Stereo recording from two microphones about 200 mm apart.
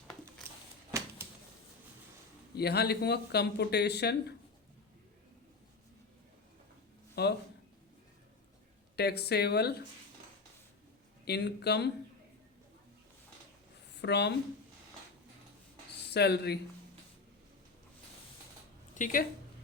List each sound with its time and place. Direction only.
2.6 s speech: 55° left (ahead or behind)
7.2 s speech: 55° left (ahead or behind)
9.0 s speech: 55° left (ahead or behind)
11.3 s speech: 55° left (ahead or behind)
14.0 s speech: 55° left (ahead or behind)
16.1 s speech: 55° left (ahead or behind)
18.9 s speech: 40° left (ahead or behind)